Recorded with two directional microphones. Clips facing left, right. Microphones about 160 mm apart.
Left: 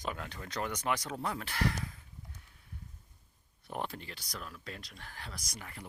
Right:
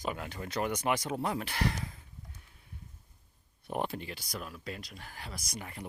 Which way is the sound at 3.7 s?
15° right (ahead or behind).